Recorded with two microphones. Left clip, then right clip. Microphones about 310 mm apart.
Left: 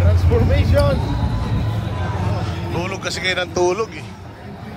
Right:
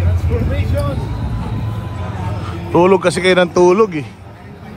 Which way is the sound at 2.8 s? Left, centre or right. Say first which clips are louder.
Right 9 dB; right.